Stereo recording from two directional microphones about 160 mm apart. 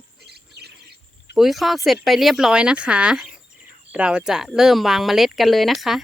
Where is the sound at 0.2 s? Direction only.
90° right.